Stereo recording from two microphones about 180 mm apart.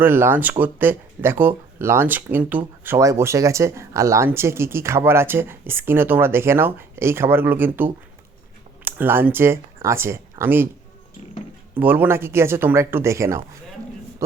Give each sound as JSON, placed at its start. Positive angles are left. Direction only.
{"t": 0.0, "sound": "speech", "side_deg": -10}
{"t": 11.8, "sound": "a man's voice", "side_deg": -10}